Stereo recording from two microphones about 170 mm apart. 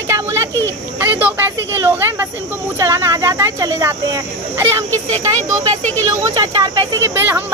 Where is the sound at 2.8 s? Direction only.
15° right (ahead or behind).